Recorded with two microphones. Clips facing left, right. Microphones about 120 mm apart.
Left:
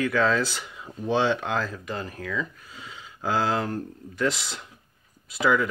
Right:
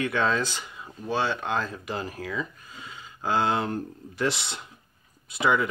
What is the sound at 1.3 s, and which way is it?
Speech, 5° right (ahead or behind).